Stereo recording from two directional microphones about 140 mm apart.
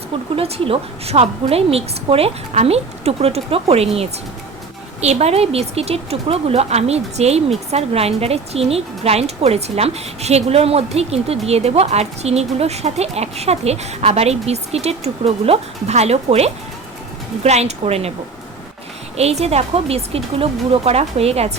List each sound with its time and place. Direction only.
0.3 s a woman's voice: 45° right (ahead or behind)
4.9 s a woman's voice: 50° right (ahead or behind)
19.1 s a woman's voice: 50° right (ahead or behind)